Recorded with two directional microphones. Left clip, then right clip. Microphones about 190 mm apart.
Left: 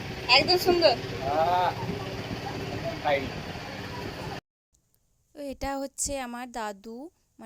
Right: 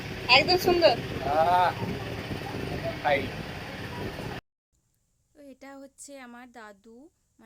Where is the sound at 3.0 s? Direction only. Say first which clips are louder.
Right 1 dB; centre (ahead or behind).